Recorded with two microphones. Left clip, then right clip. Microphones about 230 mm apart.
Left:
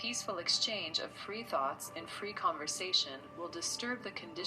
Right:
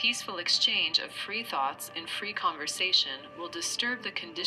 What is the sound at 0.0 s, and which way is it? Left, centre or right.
Speech, right.